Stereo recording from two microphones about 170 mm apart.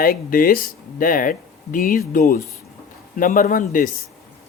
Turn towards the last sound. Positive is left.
turn(degrees=55)  # may be behind; listen again after turning